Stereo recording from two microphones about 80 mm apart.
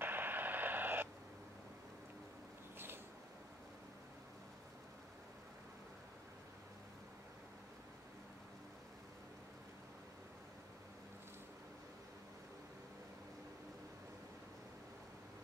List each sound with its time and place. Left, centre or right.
0.0 s radio: right